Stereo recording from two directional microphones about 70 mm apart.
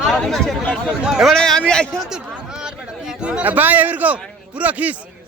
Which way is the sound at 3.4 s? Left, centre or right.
Right.